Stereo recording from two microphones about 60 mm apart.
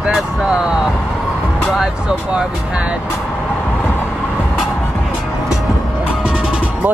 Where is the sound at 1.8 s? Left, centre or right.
Centre.